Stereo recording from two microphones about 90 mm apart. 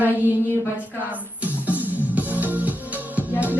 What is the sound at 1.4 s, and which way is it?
Music, 20° right (ahead or behind).